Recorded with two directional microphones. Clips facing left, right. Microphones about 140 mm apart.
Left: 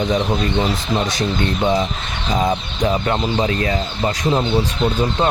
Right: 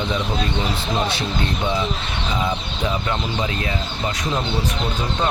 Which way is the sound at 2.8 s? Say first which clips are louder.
Left 6 dB; 45° left (ahead or behind).